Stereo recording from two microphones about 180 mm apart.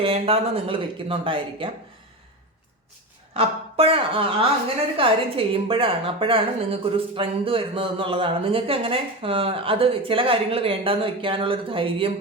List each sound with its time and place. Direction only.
0.0 s a woman's voice: 35° right (ahead or behind)
3.3 s a woman's voice: 30° right (ahead or behind)